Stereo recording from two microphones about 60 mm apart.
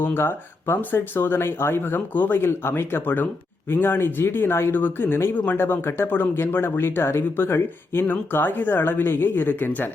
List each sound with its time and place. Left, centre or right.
0.0 s speech: left